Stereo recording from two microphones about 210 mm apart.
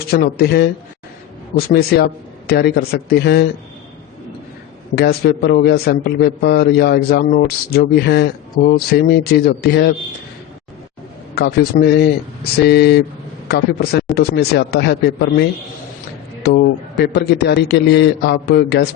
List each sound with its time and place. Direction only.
0.1 s a man's voice: 45° left (ahead or behind)
4.9 s a man's voice: 45° left (ahead or behind)
11.3 s a man's voice: 50° left (ahead or behind)
17.0 s a man's voice: 55° left (ahead or behind)